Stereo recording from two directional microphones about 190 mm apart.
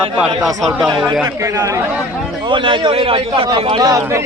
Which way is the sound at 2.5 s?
25° right (ahead or behind).